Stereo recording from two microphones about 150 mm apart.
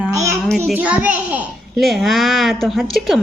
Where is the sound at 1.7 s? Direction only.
Centre (ahead or behind).